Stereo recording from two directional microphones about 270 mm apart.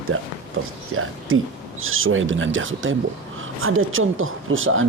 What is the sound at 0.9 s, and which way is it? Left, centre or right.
Speech, right.